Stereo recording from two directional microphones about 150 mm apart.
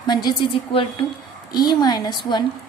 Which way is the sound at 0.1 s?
30° left (ahead or behind).